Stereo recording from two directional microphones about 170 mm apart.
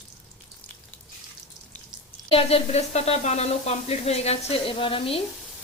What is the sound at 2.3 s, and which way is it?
Speech, 35° left (ahead or behind).